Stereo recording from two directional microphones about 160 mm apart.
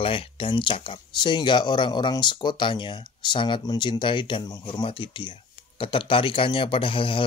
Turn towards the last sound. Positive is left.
turn(degrees=35)  # may be behind; listen again after turning